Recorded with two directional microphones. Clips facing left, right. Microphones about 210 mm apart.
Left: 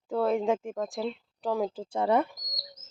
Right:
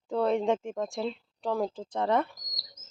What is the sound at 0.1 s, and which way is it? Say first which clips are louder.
Speech: even; centre (ahead or behind).